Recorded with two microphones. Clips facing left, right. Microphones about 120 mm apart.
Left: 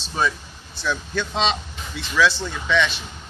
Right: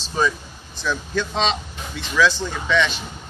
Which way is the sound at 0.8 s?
10° right (ahead or behind).